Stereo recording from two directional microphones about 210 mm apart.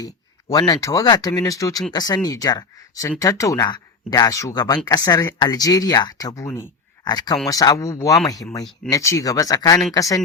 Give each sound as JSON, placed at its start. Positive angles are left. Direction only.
{"t": 0.4, "sound": "speech", "side_deg": 20}